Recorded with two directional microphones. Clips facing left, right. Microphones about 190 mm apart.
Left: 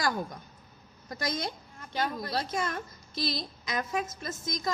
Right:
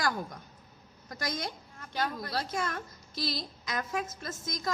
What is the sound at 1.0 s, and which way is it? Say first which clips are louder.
A woman's voice: left 3 dB; 25° left (ahead or behind).